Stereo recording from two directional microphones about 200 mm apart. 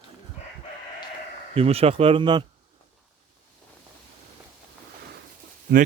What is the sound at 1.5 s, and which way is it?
Speech, 30° right (ahead or behind).